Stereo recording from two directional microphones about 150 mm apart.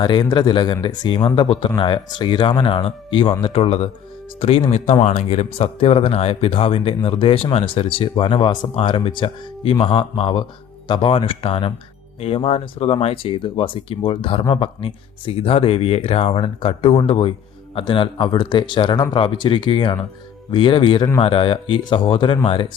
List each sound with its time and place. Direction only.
0.0 s speech: 30° left (ahead or behind)